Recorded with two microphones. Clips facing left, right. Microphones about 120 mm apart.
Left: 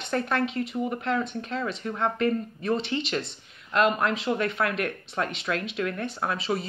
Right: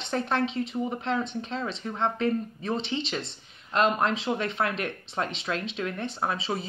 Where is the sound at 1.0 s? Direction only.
25° right (ahead or behind).